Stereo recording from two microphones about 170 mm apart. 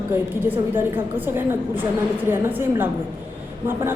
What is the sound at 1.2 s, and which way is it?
A woman's voice, 10° right (ahead or behind).